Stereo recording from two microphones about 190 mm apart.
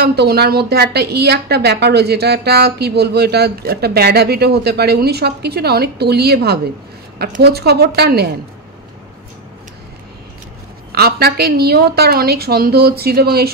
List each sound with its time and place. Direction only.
0.0 s a woman's voice: 55° right (ahead or behind)
10.9 s a woman's voice: 55° right (ahead or behind)